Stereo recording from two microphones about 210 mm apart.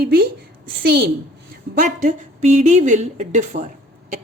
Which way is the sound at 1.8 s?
35° right (ahead or behind).